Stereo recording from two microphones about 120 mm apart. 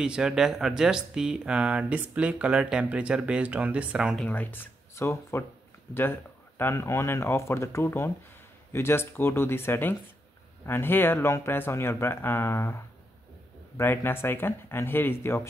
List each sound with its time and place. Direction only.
0.0 s speech: 5° right (ahead or behind)
4.2 s speech: 15° left (ahead or behind)
6.6 s speech: 20° left (ahead or behind)
13.7 s speech: 20° left (ahead or behind)